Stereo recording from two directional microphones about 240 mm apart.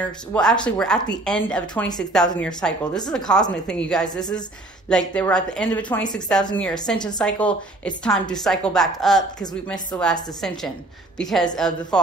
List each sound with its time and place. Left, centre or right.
0.0 s a woman's voice: centre
4.1 s a woman's voice: centre
4.8 s a woman's voice: centre
11.1 s a woman's voice: centre